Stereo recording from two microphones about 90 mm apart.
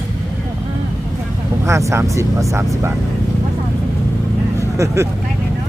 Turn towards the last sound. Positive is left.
turn(degrees=-35)  # may be behind; listen again after turning